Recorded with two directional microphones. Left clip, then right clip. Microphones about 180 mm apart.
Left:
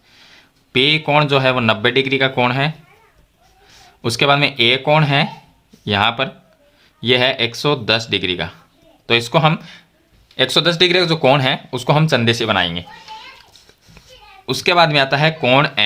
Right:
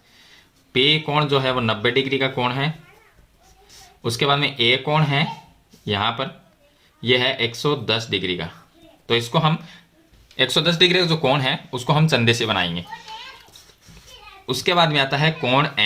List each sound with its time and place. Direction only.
0.2 s speech: 35° left (ahead or behind)
4.0 s speech: 35° left (ahead or behind)
14.4 s speech: 35° left (ahead or behind)